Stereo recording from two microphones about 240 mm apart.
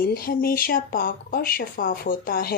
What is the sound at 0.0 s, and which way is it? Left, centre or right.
Speech, left.